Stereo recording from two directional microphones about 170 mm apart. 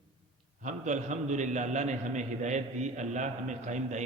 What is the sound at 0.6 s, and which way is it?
A man's voice, 45° right (ahead or behind).